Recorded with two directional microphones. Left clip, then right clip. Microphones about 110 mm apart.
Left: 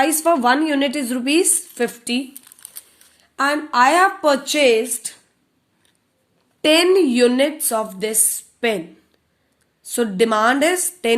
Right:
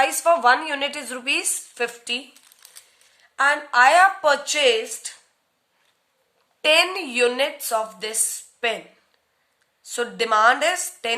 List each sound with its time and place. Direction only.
0.0 s a woman's voice: 25° left (ahead or behind)
6.6 s a woman's voice: 30° left (ahead or behind)
9.8 s a woman's voice: 35° left (ahead or behind)